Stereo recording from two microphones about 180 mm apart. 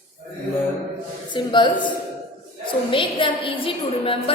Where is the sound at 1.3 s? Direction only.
25° left (ahead or behind).